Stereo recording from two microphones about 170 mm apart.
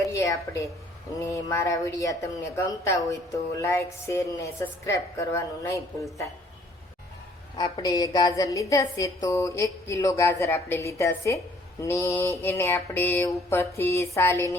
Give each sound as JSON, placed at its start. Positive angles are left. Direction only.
{"t": 0.0, "sound": "a woman's voice", "side_deg": 15}
{"t": 7.5, "sound": "a woman's voice", "side_deg": 25}